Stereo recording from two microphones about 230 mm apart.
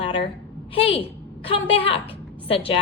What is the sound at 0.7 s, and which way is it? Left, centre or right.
A woman's voice, left.